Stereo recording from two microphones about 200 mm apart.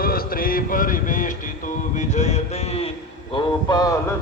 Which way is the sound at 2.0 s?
35° left (ahead or behind).